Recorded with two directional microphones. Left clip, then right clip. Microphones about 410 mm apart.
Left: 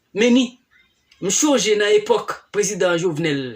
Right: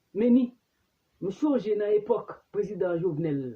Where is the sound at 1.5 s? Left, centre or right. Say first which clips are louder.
Left 9 dB; right.